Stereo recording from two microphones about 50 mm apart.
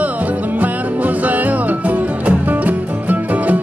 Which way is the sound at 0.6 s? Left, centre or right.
Right.